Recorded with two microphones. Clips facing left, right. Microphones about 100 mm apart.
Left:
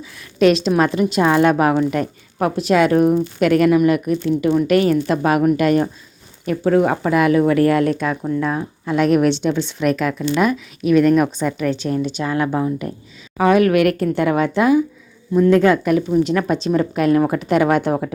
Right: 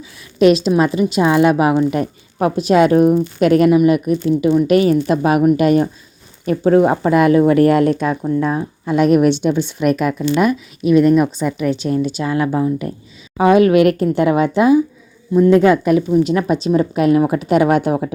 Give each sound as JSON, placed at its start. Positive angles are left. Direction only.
{"t": 0.4, "sound": "a woman's voice", "side_deg": -5}
{"t": 6.4, "sound": "a woman's voice", "side_deg": -30}
{"t": 10.8, "sound": "speech", "side_deg": -30}
{"t": 11.4, "sound": "a woman's voice", "side_deg": -15}